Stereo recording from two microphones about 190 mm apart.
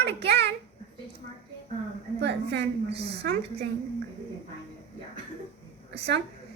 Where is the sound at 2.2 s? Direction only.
65° right (ahead or behind).